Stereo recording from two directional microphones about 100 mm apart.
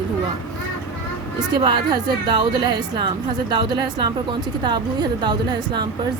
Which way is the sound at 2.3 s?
50° right (ahead or behind).